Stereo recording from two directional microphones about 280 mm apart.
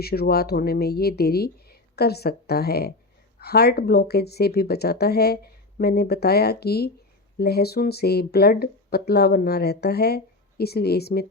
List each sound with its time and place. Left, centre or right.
0.0 s speech: left